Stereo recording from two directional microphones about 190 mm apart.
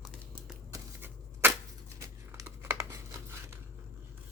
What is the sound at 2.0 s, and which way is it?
Crumpling, 15° right (ahead or behind).